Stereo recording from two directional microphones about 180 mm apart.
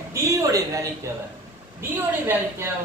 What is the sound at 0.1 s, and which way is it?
A woman's voice, 20° right (ahead or behind).